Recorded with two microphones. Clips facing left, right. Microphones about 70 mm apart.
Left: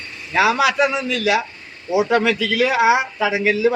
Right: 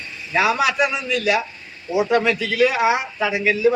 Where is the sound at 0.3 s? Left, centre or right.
Left.